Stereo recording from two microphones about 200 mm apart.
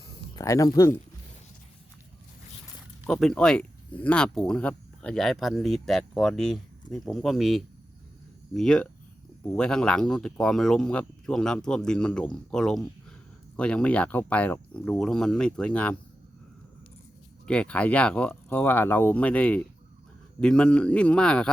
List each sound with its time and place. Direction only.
0.3 s speech: 15° left (ahead or behind)
3.1 s speech: 5° left (ahead or behind)
17.4 s speech: 5° left (ahead or behind)